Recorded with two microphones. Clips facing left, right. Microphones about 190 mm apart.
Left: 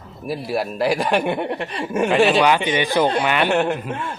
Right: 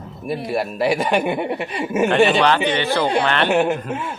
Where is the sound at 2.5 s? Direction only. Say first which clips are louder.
Even; 15° left (ahead or behind).